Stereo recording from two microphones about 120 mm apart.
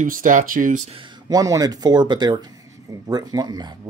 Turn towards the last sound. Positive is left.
turn(degrees=-35)  # may be behind; listen again after turning